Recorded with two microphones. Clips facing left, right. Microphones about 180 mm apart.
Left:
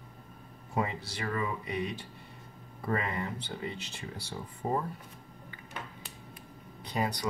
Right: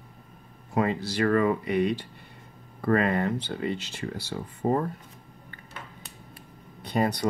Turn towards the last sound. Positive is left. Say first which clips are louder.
# right 7 dB
turn(degrees=-60)  # may be behind; listen again after turning